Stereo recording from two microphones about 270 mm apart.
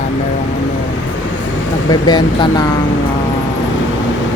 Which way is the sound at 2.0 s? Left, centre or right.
Centre.